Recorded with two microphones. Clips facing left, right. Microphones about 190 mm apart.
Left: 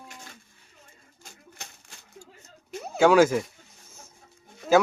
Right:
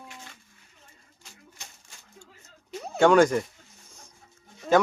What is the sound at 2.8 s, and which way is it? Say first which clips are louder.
Speech: even; 5° left (ahead or behind).